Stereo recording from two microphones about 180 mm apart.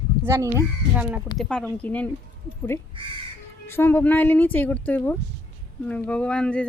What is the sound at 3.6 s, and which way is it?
Speech, 15° left (ahead or behind).